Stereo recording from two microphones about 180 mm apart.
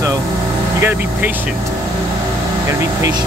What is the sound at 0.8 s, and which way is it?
Speech, 10° right (ahead or behind).